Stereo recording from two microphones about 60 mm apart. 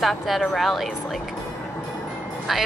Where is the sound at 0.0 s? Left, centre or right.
Centre.